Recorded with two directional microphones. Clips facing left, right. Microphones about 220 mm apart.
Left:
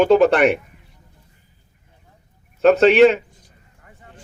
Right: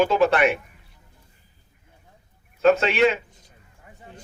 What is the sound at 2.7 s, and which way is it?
Speech, 40° left (ahead or behind).